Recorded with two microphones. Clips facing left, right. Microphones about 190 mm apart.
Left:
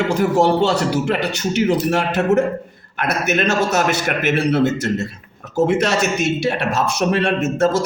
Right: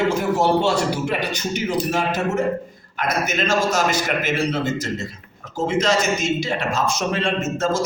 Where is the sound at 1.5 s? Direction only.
70° left (ahead or behind).